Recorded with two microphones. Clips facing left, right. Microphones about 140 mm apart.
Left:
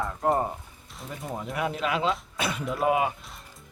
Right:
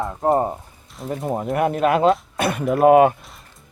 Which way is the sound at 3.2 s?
Centre (ahead or behind).